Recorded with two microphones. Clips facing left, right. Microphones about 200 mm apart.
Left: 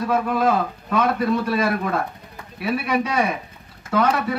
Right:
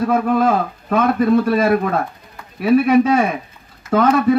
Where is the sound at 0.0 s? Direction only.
50° right (ahead or behind).